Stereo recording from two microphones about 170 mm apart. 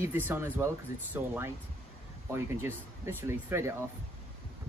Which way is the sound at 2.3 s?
15° right (ahead or behind).